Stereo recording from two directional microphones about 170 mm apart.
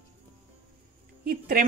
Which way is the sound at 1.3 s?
55° right (ahead or behind).